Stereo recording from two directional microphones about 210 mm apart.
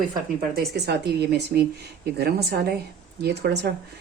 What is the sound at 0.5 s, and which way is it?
Speech, 50° right (ahead or behind).